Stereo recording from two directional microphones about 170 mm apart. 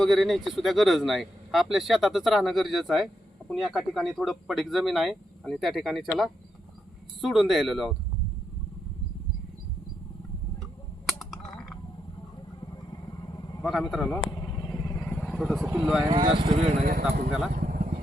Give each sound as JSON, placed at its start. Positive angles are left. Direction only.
{"t": 0.0, "sound": "speech", "side_deg": 0}
{"t": 11.0, "sound": "a sound", "side_deg": 0}
{"t": 12.9, "sound": "vehicle", "side_deg": 25}
{"t": 13.6, "sound": "speech", "side_deg": 0}
{"t": 14.3, "sound": "vehicle", "side_deg": 25}
{"t": 15.6, "sound": "speech", "side_deg": -10}
{"t": 16.0, "sound": "speech", "side_deg": -25}
{"t": 16.8, "sound": "speech", "side_deg": -60}
{"t": 17.5, "sound": "vehicle", "side_deg": -55}